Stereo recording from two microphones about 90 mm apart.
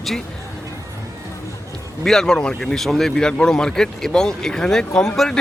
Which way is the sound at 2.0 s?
5° left (ahead or behind).